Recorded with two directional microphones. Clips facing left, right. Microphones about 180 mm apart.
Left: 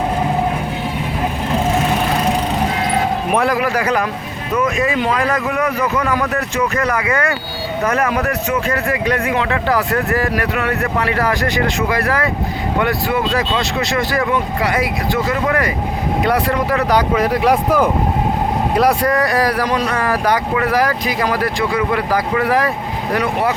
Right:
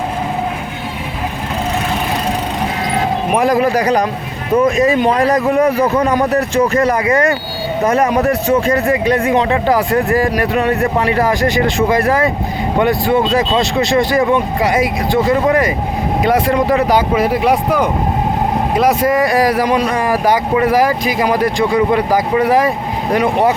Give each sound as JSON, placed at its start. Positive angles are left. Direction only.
{"t": 3.3, "sound": "a man's voice", "side_deg": -20}
{"t": 7.9, "sound": "speech", "side_deg": -25}
{"t": 17.4, "sound": "speech", "side_deg": 0}
{"t": 18.9, "sound": "speech", "side_deg": -20}